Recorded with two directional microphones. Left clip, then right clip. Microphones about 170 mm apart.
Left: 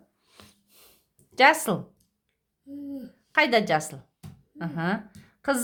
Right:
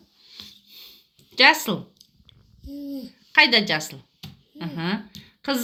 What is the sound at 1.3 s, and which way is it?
Speech, 30° left (ahead or behind).